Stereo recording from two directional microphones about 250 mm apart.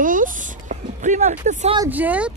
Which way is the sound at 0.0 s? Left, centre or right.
Right.